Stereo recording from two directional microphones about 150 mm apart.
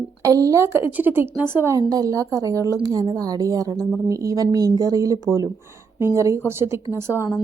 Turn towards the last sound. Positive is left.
turn(degrees=-15)  # may be behind; listen again after turning